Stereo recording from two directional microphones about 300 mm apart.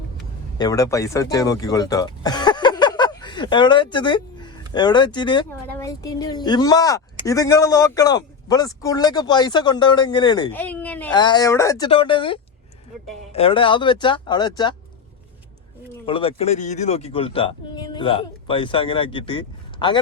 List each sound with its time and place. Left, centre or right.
0.6 s speech: centre
16.0 s speech: centre